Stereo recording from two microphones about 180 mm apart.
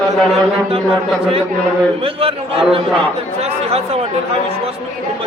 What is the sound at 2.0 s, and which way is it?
A man's voice, 30° right (ahead or behind).